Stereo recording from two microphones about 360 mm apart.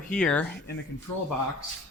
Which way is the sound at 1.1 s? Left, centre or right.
Left.